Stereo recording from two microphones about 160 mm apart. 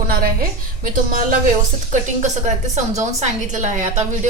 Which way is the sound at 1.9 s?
50° right (ahead or behind).